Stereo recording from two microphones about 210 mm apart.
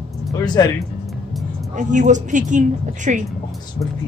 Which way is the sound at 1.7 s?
35° right (ahead or behind).